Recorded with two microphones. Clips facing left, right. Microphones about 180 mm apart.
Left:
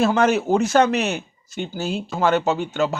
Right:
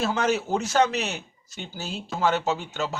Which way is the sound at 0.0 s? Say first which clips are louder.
Left 7 dB; 55° left (ahead or behind).